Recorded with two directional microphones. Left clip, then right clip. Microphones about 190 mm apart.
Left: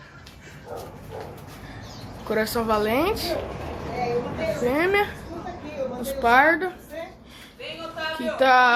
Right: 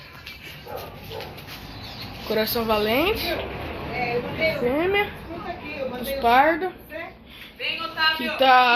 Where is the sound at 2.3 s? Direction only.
Centre (ahead or behind).